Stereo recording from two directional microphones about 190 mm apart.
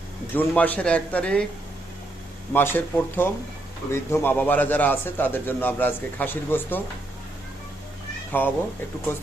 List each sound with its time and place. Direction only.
0.3 s a man's voice: 5° left (ahead or behind)
2.5 s a man's voice: 10° left (ahead or behind)
8.4 s a man's voice: 10° left (ahead or behind)